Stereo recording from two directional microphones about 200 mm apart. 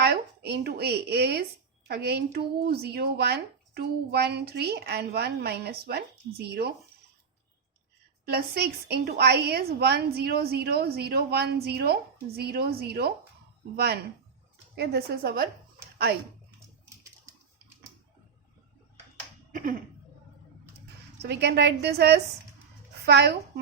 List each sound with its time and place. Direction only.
0.0 s speech: 55° right (ahead or behind)
8.2 s speech: 50° right (ahead or behind)
21.2 s a woman's voice: 55° right (ahead or behind)